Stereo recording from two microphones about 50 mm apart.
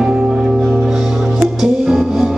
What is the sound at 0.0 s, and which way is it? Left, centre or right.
Music, centre.